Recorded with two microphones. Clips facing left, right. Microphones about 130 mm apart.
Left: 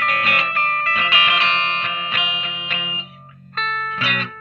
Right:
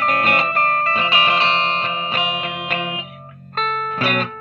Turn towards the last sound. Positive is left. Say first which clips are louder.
# right 5 dB
turn(degrees=-45)  # may be behind; listen again after turning